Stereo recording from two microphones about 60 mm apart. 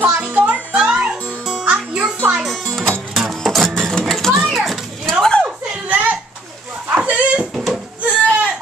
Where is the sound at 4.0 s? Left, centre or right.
Centre.